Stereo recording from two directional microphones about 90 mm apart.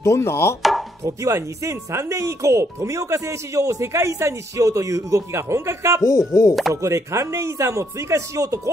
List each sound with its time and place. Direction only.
0.0 s chopping: 30° left (ahead or behind)
0.6 s chopping: centre (ahead or behind)
1.0 s speech: 35° right (ahead or behind)
6.0 s speech: 35° left (ahead or behind)
6.7 s speech: 35° right (ahead or behind)